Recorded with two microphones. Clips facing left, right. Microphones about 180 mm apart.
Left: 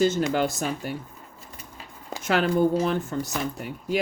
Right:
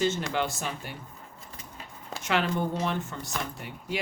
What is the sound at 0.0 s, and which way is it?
Speech, 40° left (ahead or behind).